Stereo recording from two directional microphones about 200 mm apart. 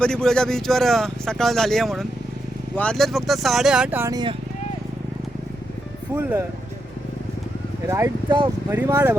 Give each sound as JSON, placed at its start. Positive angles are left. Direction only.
{"t": 0.0, "sound": "speech", "side_deg": 5}
{"t": 7.9, "sound": "speech", "side_deg": -15}